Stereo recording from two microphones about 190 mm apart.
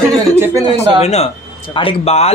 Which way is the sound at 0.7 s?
35° left (ahead or behind).